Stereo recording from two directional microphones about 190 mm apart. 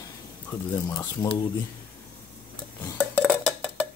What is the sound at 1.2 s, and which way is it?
Speech, 10° left (ahead or behind).